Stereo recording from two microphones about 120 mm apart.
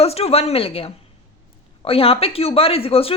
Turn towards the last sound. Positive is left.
turn(degrees=55)  # may be behind; listen again after turning